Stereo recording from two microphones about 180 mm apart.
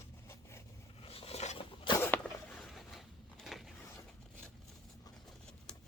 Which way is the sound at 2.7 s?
Centre (ahead or behind).